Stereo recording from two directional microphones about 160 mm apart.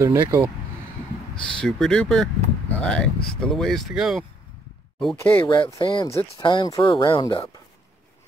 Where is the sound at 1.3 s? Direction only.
5° left (ahead or behind).